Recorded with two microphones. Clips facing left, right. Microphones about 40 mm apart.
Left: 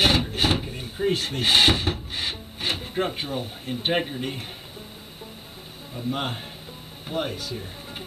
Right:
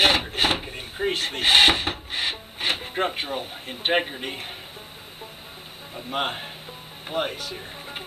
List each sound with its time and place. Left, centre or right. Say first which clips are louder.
0.0 s drawer open or close: right 1 dB; centre
5.9 s a man's voice: right 1 dB; right